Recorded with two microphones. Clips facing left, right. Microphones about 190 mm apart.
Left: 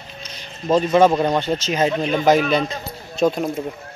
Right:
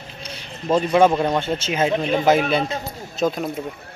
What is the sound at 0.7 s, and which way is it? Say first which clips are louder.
Speech: left 1 dB; 5° right (ahead or behind).